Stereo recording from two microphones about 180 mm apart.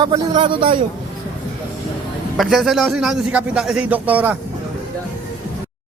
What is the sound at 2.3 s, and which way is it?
A man's voice, centre (ahead or behind).